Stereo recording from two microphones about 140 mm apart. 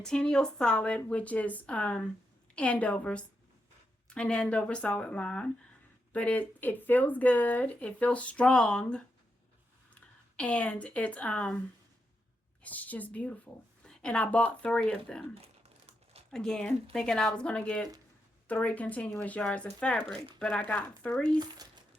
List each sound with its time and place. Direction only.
0.0 s speech: 5° left (ahead or behind)
12.6 s speech: 10° left (ahead or behind)
16.3 s speech: 5° left (ahead or behind)
21.2 s speech: 30° right (ahead or behind)